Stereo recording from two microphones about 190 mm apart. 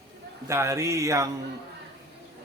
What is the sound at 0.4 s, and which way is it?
Speech, 15° right (ahead or behind).